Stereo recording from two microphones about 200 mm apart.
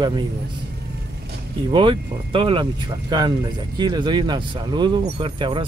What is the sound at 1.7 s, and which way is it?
Speech, 25° right (ahead or behind).